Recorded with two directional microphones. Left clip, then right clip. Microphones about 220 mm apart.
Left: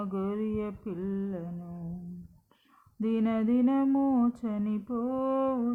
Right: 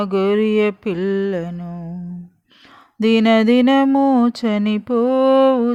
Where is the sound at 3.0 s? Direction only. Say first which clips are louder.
Right 16 dB; 40° right (ahead or behind).